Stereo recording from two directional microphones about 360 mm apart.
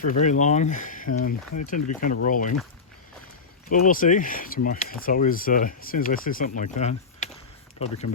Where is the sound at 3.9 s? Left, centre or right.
Left.